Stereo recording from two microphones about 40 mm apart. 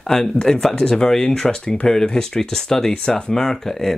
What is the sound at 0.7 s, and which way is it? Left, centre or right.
Speech, left.